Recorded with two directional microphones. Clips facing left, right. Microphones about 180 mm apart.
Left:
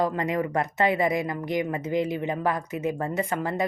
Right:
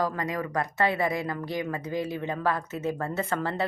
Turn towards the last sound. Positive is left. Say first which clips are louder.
# left 2 dB
turn(degrees=15)  # may be behind; listen again after turning